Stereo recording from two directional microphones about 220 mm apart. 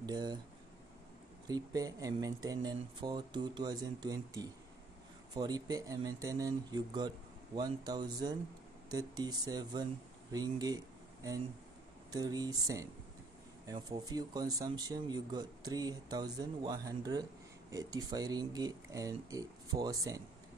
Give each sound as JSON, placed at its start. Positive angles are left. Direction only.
{"t": 0.0, "sound": "speech", "side_deg": -20}
{"t": 1.5, "sound": "speech", "side_deg": -15}
{"t": 12.1, "sound": "speech", "side_deg": -15}